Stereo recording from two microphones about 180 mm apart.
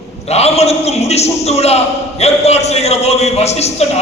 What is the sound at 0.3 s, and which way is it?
A man's voice, 35° left (ahead or behind).